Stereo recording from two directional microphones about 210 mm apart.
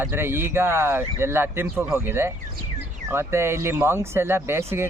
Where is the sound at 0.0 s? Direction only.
10° right (ahead or behind).